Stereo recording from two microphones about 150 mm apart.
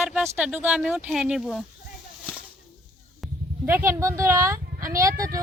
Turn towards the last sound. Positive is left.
turn(degrees=-20)  # may be behind; listen again after turning